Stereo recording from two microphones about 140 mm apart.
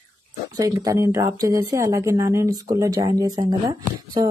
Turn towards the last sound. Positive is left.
turn(degrees=-25)  # may be behind; listen again after turning